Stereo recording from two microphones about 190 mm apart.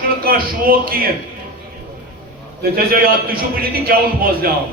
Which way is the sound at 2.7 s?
50° right (ahead or behind).